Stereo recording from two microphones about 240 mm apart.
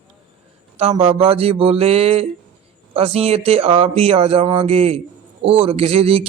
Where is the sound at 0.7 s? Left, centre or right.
Right.